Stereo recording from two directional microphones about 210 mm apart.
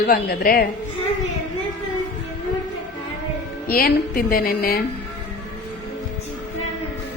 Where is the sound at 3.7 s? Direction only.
45° left (ahead or behind).